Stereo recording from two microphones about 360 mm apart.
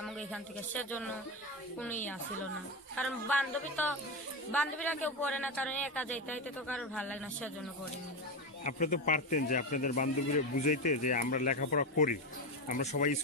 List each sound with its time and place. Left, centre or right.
0.0 s a man's voice: centre
3.0 s a man's voice: centre
8.6 s speech: left